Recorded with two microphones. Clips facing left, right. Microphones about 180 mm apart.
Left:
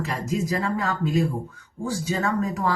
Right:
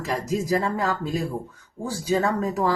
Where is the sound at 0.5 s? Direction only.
35° right (ahead or behind).